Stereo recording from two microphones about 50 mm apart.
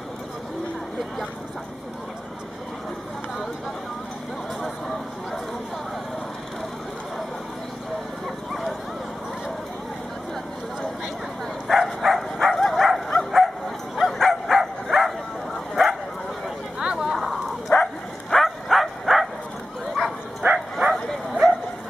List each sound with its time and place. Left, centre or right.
8.5 s dog: centre
11.6 s dog: centre
13.9 s bow-wow: centre
16.8 s a sound: centre
17.7 s bow-wow: left
18.3 s bow-wow: centre
20.7 s bow-wow: centre